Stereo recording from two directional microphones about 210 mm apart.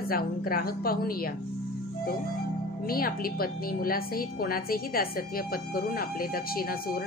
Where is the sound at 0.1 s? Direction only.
45° left (ahead or behind).